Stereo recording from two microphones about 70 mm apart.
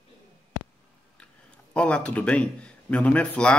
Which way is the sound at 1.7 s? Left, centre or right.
Centre.